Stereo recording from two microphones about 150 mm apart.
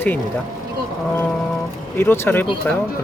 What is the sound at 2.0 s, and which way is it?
Speech, 15° left (ahead or behind).